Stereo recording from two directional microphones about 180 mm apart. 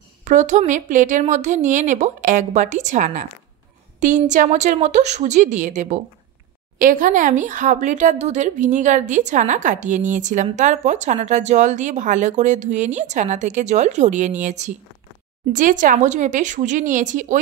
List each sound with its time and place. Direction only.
0.2 s speech: 45° right (ahead or behind)
4.3 s speech: 40° right (ahead or behind)